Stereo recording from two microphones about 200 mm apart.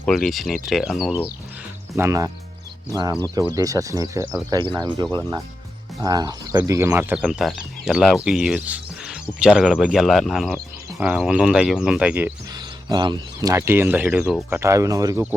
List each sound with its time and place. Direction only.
0.0 s speech: centre (ahead or behind)
2.0 s speech: 15° right (ahead or behind)
12.5 s speech: 20° right (ahead or behind); by 14.6 s centre (ahead or behind)
14.6 s speech: 15° right (ahead or behind)